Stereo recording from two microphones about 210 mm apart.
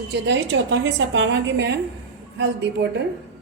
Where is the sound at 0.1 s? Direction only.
60° right (ahead or behind).